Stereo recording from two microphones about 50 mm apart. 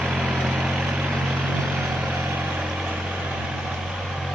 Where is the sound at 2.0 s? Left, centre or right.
Centre.